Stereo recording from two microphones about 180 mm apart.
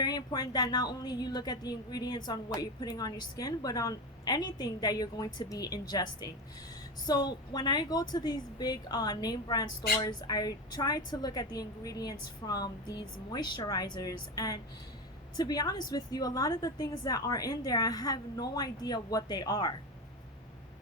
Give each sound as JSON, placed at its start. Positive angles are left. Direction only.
{"t": 0.0, "sound": "a woman's voice", "side_deg": 20}